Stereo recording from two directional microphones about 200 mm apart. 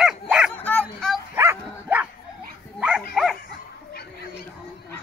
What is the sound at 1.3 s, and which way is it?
Dog, 10° right (ahead or behind).